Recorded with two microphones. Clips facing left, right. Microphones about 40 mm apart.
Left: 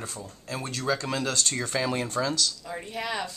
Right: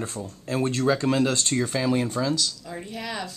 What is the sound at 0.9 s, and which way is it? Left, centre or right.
Speech, centre.